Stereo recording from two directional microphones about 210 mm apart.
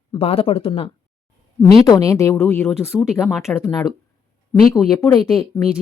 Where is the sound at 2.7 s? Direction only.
Centre (ahead or behind).